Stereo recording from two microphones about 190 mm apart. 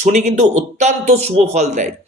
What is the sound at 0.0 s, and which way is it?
Speech, 35° right (ahead or behind).